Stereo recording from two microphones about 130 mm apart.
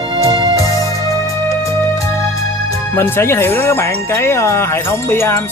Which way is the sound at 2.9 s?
15° left (ahead or behind).